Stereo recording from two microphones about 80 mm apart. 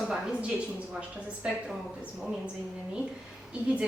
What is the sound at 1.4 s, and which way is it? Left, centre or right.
Speech, centre.